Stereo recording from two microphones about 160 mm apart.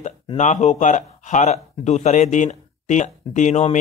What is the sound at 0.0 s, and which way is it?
Speech, 45° left (ahead or behind).